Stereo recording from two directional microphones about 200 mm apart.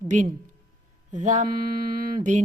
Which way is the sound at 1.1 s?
40° right (ahead or behind).